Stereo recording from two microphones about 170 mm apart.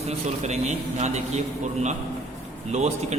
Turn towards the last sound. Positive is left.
turn(degrees=-40)  # may be behind; listen again after turning